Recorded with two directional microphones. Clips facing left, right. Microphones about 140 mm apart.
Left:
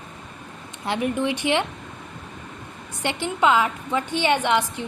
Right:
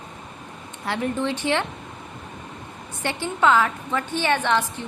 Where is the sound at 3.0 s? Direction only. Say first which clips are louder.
Even; 15° left (ahead or behind).